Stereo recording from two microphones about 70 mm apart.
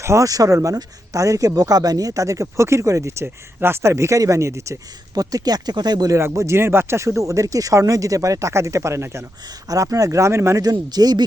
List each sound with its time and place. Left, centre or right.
0.0 s speech: right
0.3 s speech: right
5.1 s speech: right
6.1 s speech: right
9.6 s speech: right
10.6 s speech: right